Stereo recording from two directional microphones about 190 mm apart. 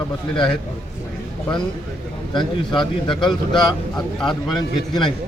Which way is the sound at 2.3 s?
25° left (ahead or behind).